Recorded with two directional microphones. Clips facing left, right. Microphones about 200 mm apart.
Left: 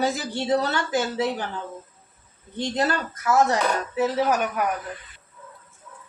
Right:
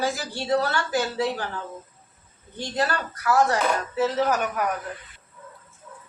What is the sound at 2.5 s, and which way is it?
Speech, 20° left (ahead or behind).